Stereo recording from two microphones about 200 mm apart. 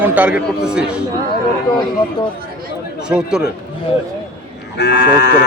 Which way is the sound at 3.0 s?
5° right (ahead or behind).